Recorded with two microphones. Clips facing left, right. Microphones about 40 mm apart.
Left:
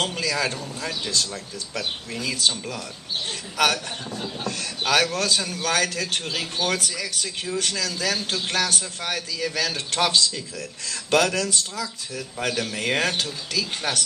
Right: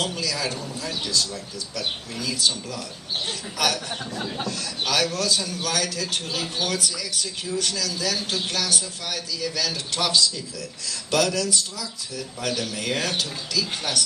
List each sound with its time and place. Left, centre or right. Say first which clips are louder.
0.0 s a man's voice: left 2 dB; left